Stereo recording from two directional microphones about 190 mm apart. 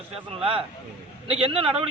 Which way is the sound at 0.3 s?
30° right (ahead or behind).